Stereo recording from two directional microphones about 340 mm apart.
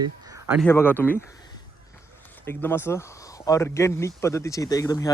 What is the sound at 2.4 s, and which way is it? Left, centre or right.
Speech, centre.